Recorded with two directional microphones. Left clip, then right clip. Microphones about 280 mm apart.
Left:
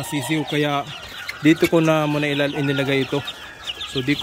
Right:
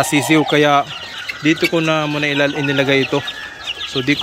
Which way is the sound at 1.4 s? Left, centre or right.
Centre.